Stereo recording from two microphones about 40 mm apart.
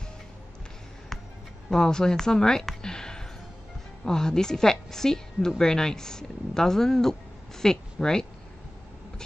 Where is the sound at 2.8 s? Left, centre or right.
Centre.